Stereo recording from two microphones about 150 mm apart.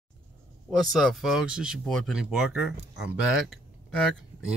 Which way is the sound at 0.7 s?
Centre (ahead or behind).